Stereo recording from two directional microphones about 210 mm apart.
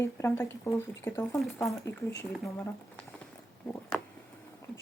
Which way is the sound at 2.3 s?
Centre (ahead or behind).